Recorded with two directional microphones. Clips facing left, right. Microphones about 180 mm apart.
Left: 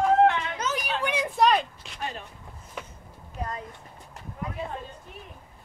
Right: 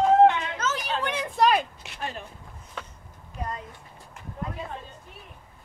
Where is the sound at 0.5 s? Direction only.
15° left (ahead or behind).